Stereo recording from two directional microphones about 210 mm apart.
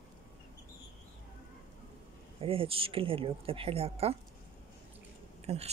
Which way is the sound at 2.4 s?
25° right (ahead or behind).